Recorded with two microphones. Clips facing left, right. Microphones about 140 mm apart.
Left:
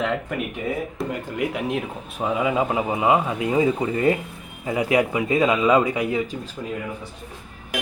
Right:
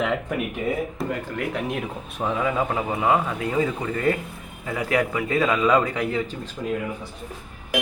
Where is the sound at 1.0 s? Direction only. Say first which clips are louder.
Even; centre (ahead or behind).